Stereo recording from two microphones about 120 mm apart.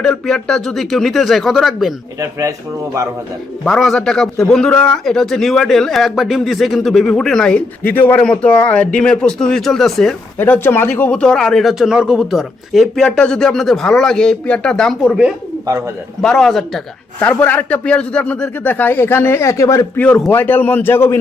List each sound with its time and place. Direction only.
0.0 s a man's voice: 5° left (ahead or behind)
3.6 s a man's voice: 5° left (ahead or behind)
10.3 s a man's voice: 15° left (ahead or behind)
16.2 s a man's voice: 5° left (ahead or behind)
17.2 s a man's voice: 15° left (ahead or behind)
20.0 s a man's voice: 10° left (ahead or behind)